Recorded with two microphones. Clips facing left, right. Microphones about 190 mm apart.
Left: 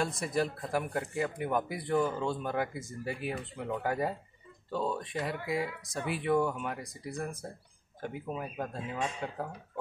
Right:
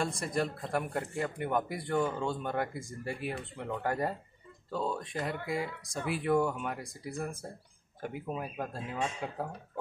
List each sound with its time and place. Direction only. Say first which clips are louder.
0.0 s speech: left 1 dB; centre (ahead or behind)